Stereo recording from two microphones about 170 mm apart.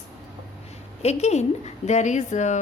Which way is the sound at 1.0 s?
40° left (ahead or behind).